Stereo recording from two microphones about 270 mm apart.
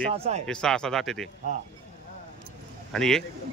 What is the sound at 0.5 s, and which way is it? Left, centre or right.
Speech, centre.